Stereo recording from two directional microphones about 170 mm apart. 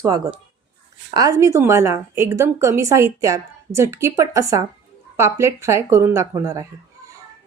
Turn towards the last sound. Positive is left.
turn(degrees=-15)  # may be behind; listen again after turning